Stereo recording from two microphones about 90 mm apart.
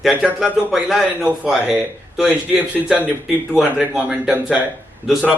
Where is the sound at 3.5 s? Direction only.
5° right (ahead or behind).